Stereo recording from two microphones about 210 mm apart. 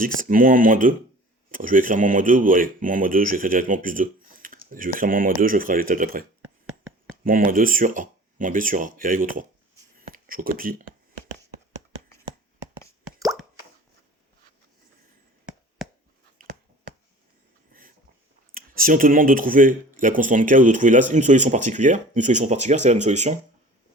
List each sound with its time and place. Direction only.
0.0 s speech: 40° right (ahead or behind)
7.3 s speech: 40° right (ahead or behind)
10.0 s a sound: 45° right (ahead or behind)
16.4 s finger snapping: 50° right (ahead or behind)
17.7 s dog: 40° right (ahead or behind)
18.5 s speech: 40° right (ahead or behind)